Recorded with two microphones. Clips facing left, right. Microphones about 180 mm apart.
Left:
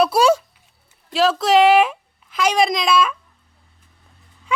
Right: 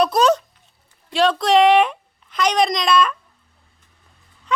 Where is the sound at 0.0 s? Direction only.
10° left (ahead or behind).